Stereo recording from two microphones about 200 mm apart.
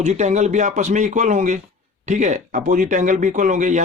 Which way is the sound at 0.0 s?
35° right (ahead or behind).